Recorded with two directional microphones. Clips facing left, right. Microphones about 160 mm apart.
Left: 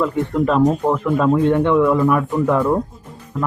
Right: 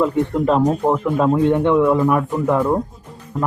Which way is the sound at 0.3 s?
25° right (ahead or behind).